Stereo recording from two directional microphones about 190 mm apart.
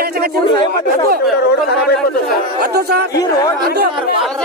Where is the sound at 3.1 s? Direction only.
20° left (ahead or behind).